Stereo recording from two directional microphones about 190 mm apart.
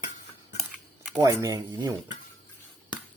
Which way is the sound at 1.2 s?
20° right (ahead or behind).